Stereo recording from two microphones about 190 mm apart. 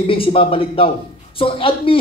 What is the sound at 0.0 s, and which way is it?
A man's voice, 30° left (ahead or behind).